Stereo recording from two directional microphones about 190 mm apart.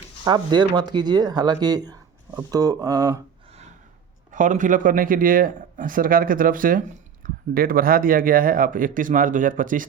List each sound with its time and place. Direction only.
0.3 s speech: 20° right (ahead or behind)
4.3 s a man's voice: 40° right (ahead or behind)